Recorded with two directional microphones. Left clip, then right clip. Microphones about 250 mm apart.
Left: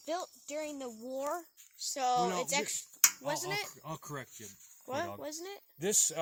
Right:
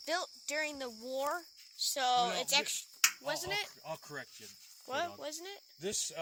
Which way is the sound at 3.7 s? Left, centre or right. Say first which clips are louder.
Even; left.